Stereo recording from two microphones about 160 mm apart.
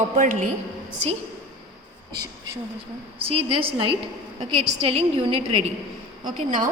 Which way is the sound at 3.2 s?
35° right (ahead or behind).